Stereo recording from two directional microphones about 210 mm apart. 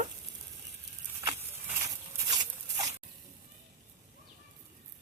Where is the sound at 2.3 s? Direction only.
20° right (ahead or behind).